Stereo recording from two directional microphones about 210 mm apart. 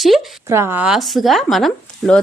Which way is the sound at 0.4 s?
10° right (ahead or behind).